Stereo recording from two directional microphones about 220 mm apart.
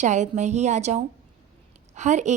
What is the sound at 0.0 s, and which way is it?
Speech, 30° right (ahead or behind).